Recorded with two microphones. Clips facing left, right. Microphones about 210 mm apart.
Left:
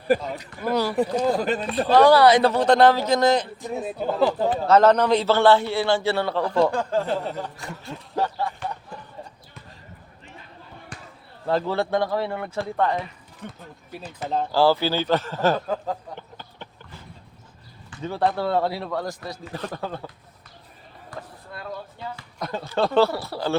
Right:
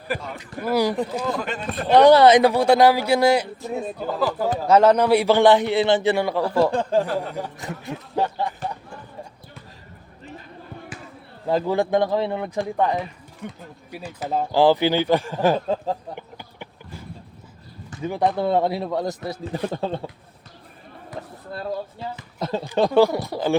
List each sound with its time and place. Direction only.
0.1 s speech: 40° left (ahead or behind)
0.7 s a man's voice: 15° right (ahead or behind)
1.2 s speech: 35° left (ahead or behind)
1.9 s a man's voice: 20° right (ahead or behind)
4.2 s speech: 25° left (ahead or behind)
4.6 s a man's voice: 10° right (ahead or behind)
6.7 s speech: 20° right (ahead or behind)
11.4 s a man's voice: 15° right (ahead or behind)
15.6 s speech: 25° right (ahead or behind)
16.1 s a sound: 15° right (ahead or behind)
18.0 s speech: 15° right (ahead or behind)
21.1 s basketball bounce: 30° right (ahead or behind)
22.1 s a man's voice: 25° right (ahead or behind)